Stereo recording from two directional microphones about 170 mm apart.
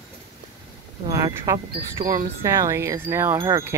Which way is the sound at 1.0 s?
20° right (ahead or behind).